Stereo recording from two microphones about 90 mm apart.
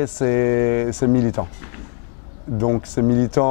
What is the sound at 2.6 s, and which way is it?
Speech, 20° left (ahead or behind).